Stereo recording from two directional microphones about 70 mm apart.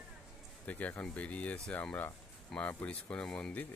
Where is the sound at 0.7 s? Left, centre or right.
Left.